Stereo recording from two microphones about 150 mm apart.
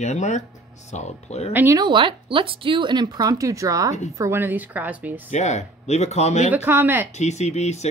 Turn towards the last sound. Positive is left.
turn(degrees=50)  # may be behind; listen again after turning